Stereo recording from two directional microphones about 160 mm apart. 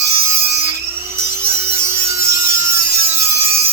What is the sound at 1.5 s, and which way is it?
Wood, 15° right (ahead or behind).